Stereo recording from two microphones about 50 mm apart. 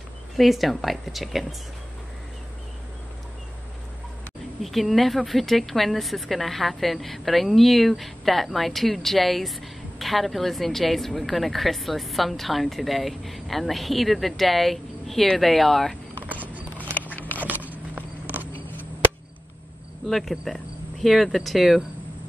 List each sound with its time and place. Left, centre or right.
0.4 s a woman's voice: centre
4.6 s a woman's voice: centre
16.2 s a sound: right
17.1 s biting: left
17.5 s a sound: right
20.1 s a woman's voice: centre